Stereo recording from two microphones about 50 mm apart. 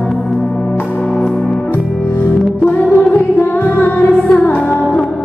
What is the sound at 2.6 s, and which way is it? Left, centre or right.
Music, left.